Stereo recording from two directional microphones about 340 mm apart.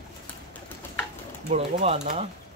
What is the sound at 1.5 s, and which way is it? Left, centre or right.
Speech, centre.